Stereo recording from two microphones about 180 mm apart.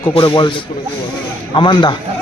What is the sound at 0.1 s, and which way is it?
Speech, 30° left (ahead or behind).